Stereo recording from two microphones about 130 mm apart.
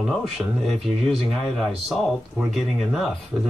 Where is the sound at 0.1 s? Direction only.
Centre (ahead or behind).